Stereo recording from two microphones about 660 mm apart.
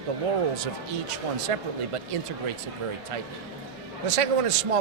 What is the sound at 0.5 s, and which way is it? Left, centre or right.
Speech, right.